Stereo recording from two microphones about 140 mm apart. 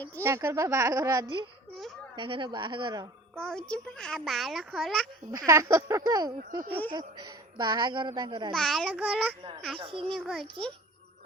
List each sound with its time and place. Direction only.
0.2 s speech: 15° right (ahead or behind)
2.1 s speech: 40° right (ahead or behind)
3.3 s a woman's voice: 5° left (ahead or behind)
5.5 s speech: 20° right (ahead or behind)
8.5 s a woman's voice: 5° left (ahead or behind)
9.7 s speech: 40° right (ahead or behind)
10.1 s a woman's voice: centre (ahead or behind)